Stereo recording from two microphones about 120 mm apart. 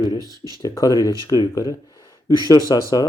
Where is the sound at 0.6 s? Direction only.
30° left (ahead or behind).